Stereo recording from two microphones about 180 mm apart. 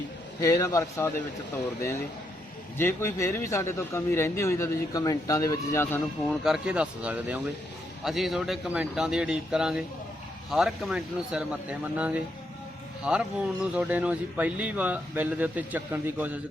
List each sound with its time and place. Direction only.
0.3 s a man's voice: 20° left (ahead or behind)
2.7 s a man's voice: 10° left (ahead or behind)
6.2 s speech: centre (ahead or behind)